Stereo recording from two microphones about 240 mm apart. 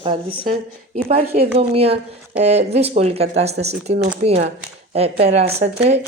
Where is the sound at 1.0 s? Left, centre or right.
Right.